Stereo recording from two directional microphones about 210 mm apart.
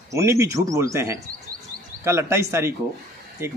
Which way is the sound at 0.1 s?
15° right (ahead or behind).